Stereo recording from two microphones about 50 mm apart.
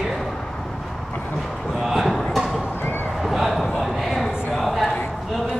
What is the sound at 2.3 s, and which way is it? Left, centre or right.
Horse, centre.